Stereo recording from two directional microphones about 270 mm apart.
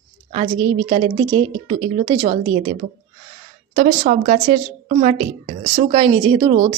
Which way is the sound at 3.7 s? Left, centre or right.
Right.